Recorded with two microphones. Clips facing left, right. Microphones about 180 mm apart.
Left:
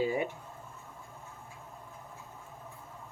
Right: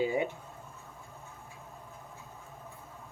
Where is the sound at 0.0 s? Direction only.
20° right (ahead or behind).